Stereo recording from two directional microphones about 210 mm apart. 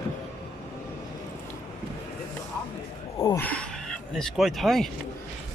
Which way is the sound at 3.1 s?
10° left (ahead or behind).